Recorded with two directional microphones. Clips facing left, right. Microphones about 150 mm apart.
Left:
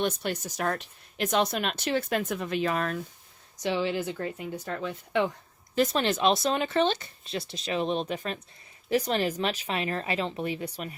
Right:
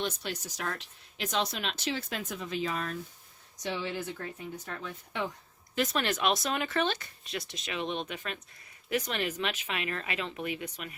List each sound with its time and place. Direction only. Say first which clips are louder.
0.0 s speech: left 6 dB; 55° left (ahead or behind)
3.6 s speech: left 7 dB; 90° left
5.7 s speech: left 5 dB; 30° left (ahead or behind)